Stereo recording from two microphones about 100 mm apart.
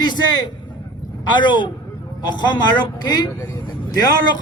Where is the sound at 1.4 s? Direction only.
50° left (ahead or behind).